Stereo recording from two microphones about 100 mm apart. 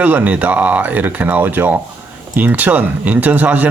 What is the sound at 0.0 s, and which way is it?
Speech, 15° right (ahead or behind).